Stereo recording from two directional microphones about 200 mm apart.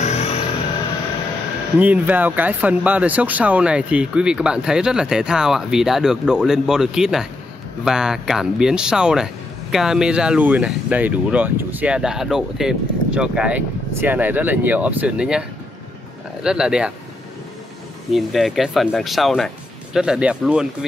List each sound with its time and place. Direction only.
0.0 s music: 30° left (ahead or behind)
1.8 s speech: 10° right (ahead or behind)
16.4 s speech: 5° right (ahead or behind)
18.1 s speech: centre (ahead or behind)